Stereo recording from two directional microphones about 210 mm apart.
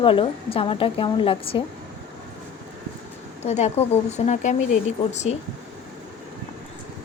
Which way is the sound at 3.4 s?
30° left (ahead or behind).